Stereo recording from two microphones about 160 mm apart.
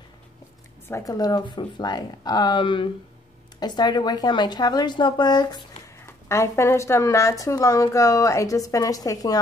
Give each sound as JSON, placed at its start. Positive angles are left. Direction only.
{"t": 0.8, "sound": "a woman's voice", "side_deg": 20}